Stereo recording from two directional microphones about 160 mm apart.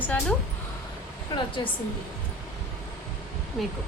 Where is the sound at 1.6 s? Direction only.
30° left (ahead or behind).